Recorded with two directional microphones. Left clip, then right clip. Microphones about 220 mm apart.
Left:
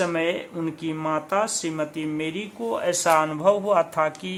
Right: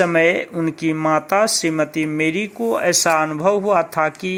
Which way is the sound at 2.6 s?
25° right (ahead or behind).